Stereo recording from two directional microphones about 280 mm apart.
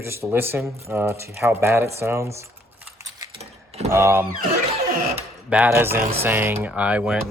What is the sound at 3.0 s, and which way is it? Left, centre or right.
Keys jangling, centre.